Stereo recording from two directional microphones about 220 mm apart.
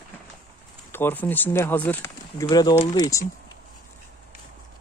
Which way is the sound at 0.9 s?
10° left (ahead or behind).